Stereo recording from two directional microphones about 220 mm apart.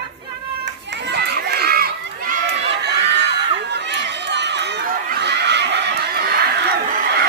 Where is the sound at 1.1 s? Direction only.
45° right (ahead or behind).